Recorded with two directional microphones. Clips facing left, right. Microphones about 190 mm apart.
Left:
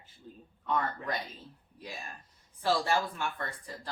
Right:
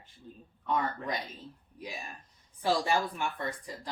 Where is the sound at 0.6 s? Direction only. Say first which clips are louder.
Right 1 dB; 10° right (ahead or behind).